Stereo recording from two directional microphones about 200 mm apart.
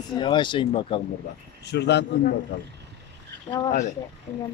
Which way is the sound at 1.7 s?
60° left (ahead or behind).